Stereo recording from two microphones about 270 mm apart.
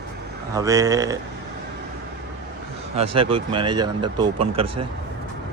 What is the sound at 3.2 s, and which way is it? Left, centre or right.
Speech, centre.